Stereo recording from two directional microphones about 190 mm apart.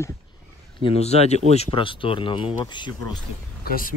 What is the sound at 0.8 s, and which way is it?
Speech, 35° left (ahead or behind).